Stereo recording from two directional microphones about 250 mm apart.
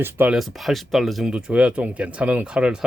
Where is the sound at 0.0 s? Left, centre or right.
Centre.